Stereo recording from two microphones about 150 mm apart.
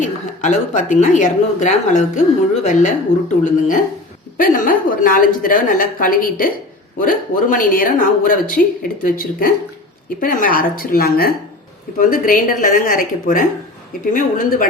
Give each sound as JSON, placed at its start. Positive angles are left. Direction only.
{"t": 0.0, "sound": "a woman's voice", "side_deg": 55}
{"t": 11.9, "sound": "a woman's voice", "side_deg": 65}